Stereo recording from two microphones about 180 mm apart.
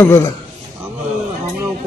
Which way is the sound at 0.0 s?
10° left (ahead or behind).